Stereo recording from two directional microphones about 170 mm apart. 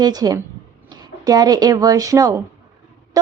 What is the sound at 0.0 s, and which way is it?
A woman's voice, 20° right (ahead or behind).